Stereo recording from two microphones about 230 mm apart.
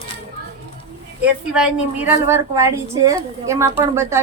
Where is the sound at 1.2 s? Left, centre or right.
Centre.